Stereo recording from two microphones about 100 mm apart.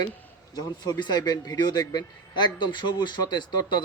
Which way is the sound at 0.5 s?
45° left (ahead or behind).